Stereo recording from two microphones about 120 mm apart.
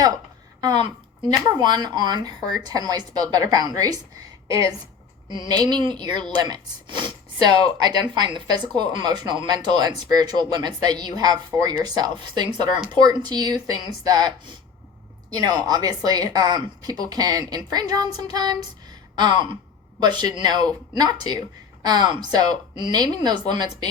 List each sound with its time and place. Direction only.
0.6 s a woman's voice: 35° right (ahead or behind)
5.3 s speech: 35° right (ahead or behind)